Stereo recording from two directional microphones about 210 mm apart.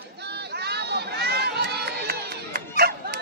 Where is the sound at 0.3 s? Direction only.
50° right (ahead or behind).